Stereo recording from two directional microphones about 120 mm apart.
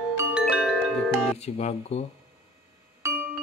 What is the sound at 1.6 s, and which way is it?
Speech, 70° left (ahead or behind).